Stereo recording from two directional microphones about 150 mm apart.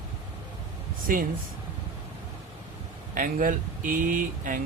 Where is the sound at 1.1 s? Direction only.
70° right (ahead or behind).